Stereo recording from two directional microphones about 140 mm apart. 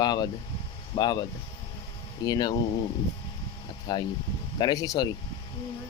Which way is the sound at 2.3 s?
30° left (ahead or behind).